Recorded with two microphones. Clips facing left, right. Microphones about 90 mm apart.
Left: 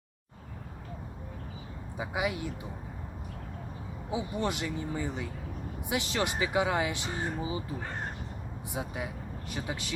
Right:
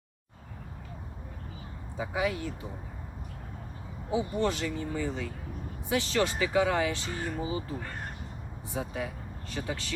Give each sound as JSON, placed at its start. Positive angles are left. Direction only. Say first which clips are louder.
{"t": 2.0, "sound": "speech", "louder": "right 2 dB", "side_deg": 15}
{"t": 4.1, "sound": "speech", "louder": "right 3 dB", "side_deg": 15}